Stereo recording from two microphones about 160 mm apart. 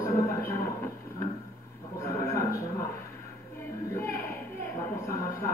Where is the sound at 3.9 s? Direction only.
15° left (ahead or behind).